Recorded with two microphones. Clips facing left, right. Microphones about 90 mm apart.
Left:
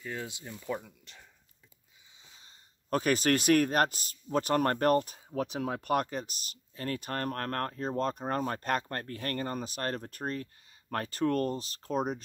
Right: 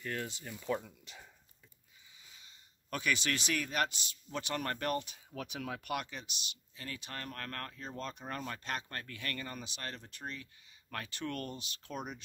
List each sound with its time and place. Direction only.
0.0 s speech: 15° left (ahead or behind)
0.8 s speech: 5° right (ahead or behind)
2.3 s speech: 35° left (ahead or behind)